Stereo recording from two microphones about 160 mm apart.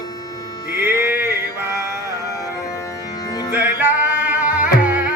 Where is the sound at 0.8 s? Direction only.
15° right (ahead or behind).